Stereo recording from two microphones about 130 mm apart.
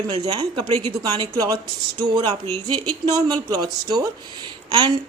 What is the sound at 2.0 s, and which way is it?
A woman's voice, 30° right (ahead or behind).